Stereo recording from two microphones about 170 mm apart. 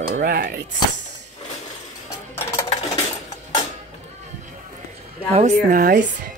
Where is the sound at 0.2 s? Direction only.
65° right (ahead or behind).